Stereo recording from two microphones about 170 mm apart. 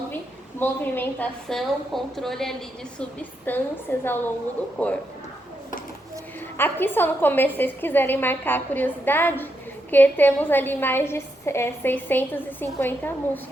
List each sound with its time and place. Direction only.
0.6 s a woman's voice: 10° left (ahead or behind)
6.6 s a woman's voice: 10° left (ahead or behind)